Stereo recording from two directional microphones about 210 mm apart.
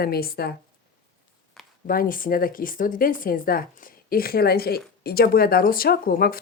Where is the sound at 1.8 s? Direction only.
40° left (ahead or behind).